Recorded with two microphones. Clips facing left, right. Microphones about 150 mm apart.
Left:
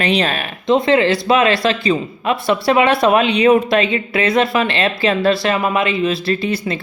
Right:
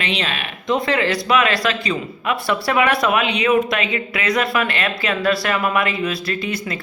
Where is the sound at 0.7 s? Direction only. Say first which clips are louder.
Left 6 dB; 25° left (ahead or behind).